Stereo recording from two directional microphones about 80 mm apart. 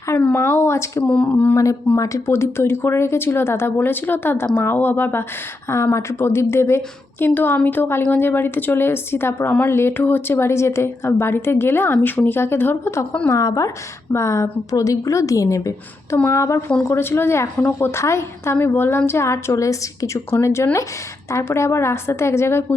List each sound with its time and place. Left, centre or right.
0.3 s speech: left
1.0 s speech: centre
2.0 s a woman's voice: left
13.2 s a woman's voice: left
16.1 s speech: left